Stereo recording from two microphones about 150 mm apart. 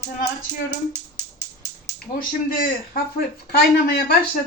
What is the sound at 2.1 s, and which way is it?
Speech, 75° left (ahead or behind).